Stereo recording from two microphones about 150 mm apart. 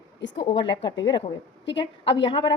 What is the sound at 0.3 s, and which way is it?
Speech, 35° left (ahead or behind).